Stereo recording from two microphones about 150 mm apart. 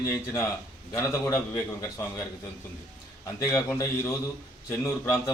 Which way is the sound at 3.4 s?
20° left (ahead or behind).